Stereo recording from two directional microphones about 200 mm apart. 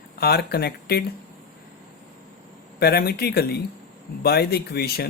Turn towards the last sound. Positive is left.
turn(degrees=50)  # may be behind; listen again after turning